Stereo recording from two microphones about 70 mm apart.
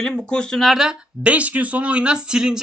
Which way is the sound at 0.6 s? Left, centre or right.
Centre.